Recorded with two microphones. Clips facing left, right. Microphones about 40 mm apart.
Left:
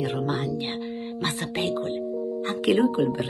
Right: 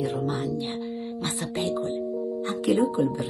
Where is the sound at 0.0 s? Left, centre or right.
Left.